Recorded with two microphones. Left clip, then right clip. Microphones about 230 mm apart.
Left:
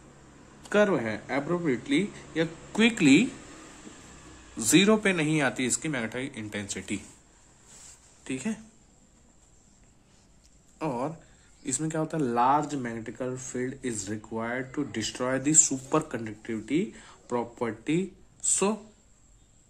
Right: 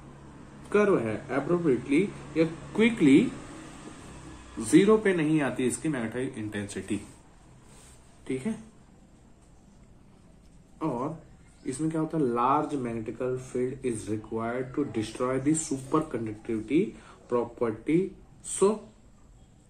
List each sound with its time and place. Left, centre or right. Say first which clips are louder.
0.7 s speech: even; left
4.6 s speech: right 1 dB; left
11.6 s speech: right 1 dB; left